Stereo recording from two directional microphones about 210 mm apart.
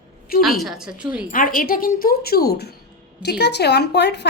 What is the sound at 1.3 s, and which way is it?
A woman's voice, 40° left (ahead or behind).